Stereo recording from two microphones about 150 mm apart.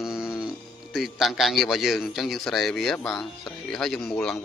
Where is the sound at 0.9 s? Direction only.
Centre (ahead or behind).